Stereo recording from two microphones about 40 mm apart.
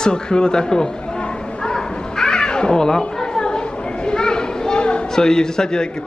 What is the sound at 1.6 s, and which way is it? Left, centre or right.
Children playing, centre.